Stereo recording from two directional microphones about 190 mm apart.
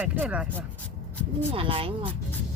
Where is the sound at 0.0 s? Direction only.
10° right (ahead or behind).